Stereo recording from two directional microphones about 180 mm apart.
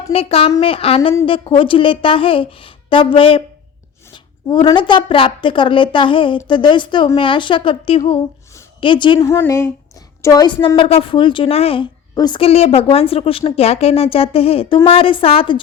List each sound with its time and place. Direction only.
0.1 s a woman's voice: 30° left (ahead or behind)